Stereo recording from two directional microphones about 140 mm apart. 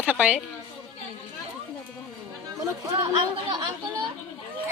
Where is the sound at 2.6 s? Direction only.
25° right (ahead or behind).